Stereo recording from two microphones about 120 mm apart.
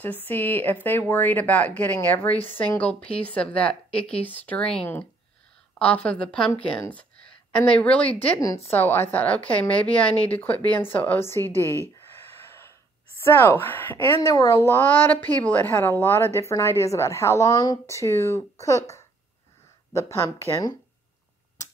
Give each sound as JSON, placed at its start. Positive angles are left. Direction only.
{"t": 0.0, "sound": "speech", "side_deg": 15}
{"t": 7.5, "sound": "speech", "side_deg": 10}
{"t": 8.1, "sound": "speech", "side_deg": 55}
{"t": 8.6, "sound": "speech", "side_deg": 20}
{"t": 11.6, "sound": "speech", "side_deg": -25}
{"t": 12.1, "sound": "a sound", "side_deg": 20}
{"t": 13.2, "sound": "speech", "side_deg": 20}
{"t": 14.2, "sound": "a woman's voice", "side_deg": 25}